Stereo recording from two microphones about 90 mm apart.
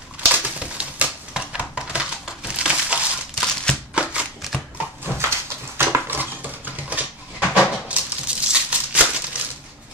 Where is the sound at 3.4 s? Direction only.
5° left (ahead or behind).